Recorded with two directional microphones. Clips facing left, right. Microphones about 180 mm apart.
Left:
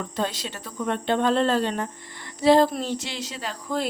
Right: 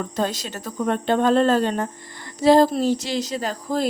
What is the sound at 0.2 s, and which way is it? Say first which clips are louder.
Speech: right 3 dB; 45° right (ahead or behind).